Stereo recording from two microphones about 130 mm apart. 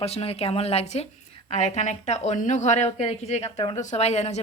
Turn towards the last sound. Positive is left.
turn(degrees=60)  # may be behind; listen again after turning